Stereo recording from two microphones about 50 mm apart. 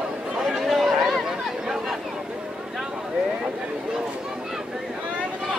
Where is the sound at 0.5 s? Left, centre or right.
Centre.